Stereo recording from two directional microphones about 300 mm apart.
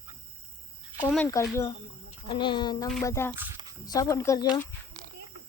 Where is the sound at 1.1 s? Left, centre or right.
Centre.